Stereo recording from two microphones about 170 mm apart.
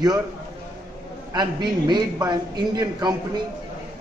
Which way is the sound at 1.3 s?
25° right (ahead or behind).